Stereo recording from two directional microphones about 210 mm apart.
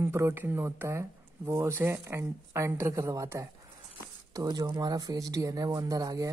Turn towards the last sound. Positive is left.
turn(degrees=-15)  # may be behind; listen again after turning